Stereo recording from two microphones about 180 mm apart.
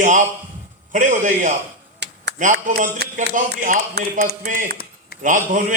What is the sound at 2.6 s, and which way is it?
A man's voice, 45° right (ahead or behind).